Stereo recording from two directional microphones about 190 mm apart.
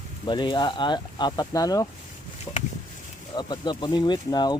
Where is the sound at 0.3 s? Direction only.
25° left (ahead or behind).